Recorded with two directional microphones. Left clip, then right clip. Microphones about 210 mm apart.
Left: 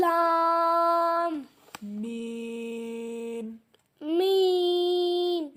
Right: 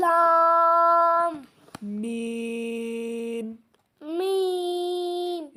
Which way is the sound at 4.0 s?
15° left (ahead or behind).